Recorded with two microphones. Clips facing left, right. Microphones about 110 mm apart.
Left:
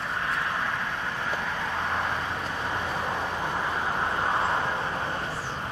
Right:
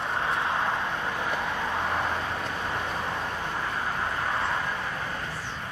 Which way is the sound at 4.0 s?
20° left (ahead or behind).